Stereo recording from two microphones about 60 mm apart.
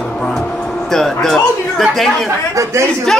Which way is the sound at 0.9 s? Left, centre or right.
Centre.